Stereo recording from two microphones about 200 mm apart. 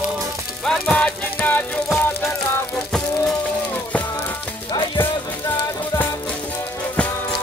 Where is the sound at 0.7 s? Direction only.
5° left (ahead or behind).